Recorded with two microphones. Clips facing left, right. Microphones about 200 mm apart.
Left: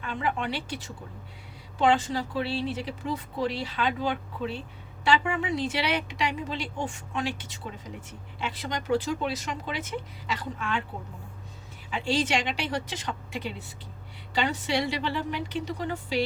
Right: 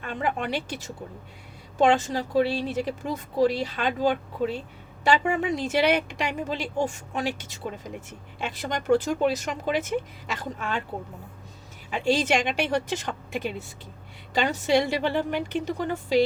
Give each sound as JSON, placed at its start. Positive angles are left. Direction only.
{"t": 0.0, "sound": "speech", "side_deg": -45}
{"t": 11.9, "sound": "speech", "side_deg": -45}